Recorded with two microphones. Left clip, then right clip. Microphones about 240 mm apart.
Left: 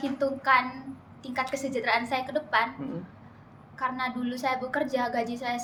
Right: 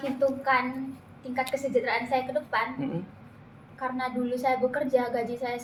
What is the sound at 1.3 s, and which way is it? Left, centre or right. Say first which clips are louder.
A woman's voice: right 3 dB; left.